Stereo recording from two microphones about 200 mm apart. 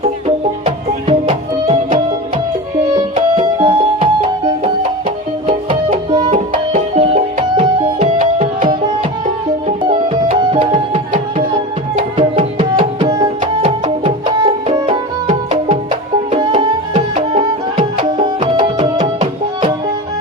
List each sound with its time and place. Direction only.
0.0 s music: 30° right (ahead or behind)
9.8 s music: 25° right (ahead or behind)
10.5 s tabla: 25° right (ahead or behind)
12.1 s music: 30° right (ahead or behind)